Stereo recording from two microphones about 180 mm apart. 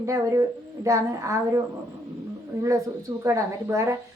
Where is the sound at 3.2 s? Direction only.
15° right (ahead or behind).